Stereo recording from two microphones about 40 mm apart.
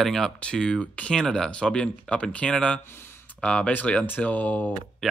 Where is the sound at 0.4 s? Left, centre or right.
Left.